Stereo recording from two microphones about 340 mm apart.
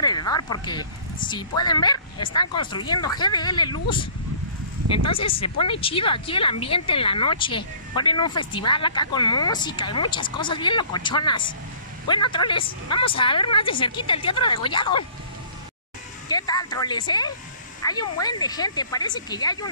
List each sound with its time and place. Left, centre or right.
0.0 s speech: centre
16.3 s speech: centre